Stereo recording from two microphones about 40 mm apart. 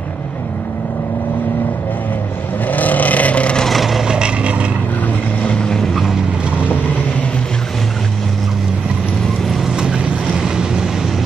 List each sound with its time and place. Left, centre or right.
2.7 s vehicle: left
3.6 s vehicle: centre
4.1 s vehicle: right
5.6 s vehicle: centre
9.8 s vehicle: right